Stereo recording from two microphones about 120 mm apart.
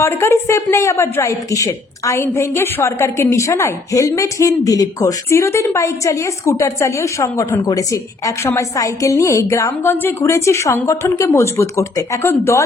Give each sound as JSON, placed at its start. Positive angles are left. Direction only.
{"t": 0.0, "sound": "speech", "side_deg": 20}